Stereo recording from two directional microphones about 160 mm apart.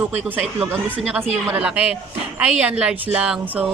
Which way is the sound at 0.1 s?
10° right (ahead or behind).